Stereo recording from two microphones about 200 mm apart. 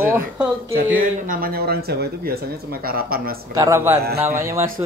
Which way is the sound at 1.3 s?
45° right (ahead or behind).